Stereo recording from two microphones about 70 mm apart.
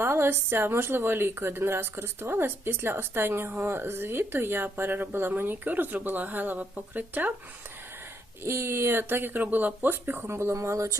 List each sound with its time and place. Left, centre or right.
0.0 s a woman's voice: right
8.4 s a woman's voice: right